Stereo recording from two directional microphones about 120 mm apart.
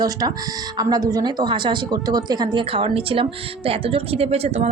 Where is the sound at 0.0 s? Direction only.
35° right (ahead or behind).